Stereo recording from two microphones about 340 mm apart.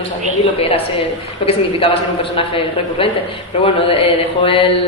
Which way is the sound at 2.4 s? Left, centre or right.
Centre.